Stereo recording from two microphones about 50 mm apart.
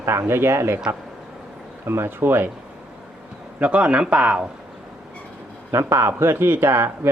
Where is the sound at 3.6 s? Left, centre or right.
Right.